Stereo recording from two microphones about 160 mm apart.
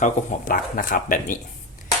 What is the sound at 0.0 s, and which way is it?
Speech, 55° left (ahead or behind).